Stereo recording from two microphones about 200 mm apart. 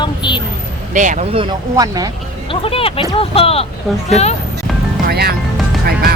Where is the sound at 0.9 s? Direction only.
40° right (ahead or behind).